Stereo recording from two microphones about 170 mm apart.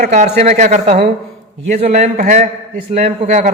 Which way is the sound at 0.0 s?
45° right (ahead or behind).